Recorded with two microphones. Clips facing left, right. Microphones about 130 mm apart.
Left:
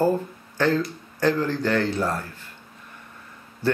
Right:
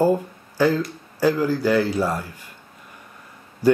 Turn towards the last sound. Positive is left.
turn(degrees=-10)  # may be behind; listen again after turning